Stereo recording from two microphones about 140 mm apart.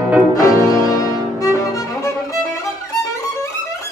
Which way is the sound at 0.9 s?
25° left (ahead or behind).